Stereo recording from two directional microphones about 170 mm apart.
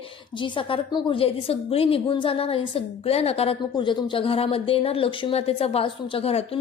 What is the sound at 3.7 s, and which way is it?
A woman's voice, 25° left (ahead or behind).